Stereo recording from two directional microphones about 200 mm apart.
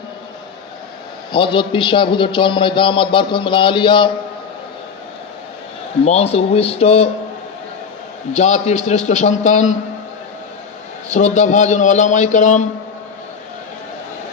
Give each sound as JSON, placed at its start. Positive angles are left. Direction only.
{"t": 1.3, "sound": "a man's voice", "side_deg": 25}
{"t": 6.1, "sound": "a man's voice", "side_deg": 30}
{"t": 8.3, "sound": "a man's voice", "side_deg": 35}
{"t": 11.1, "sound": "a man's voice", "side_deg": 35}